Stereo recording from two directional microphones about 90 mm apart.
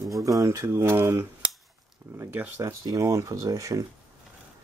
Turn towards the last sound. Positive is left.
turn(degrees=-40)  # may be behind; listen again after turning